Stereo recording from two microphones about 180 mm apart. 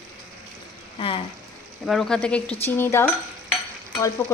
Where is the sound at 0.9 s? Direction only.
30° left (ahead or behind).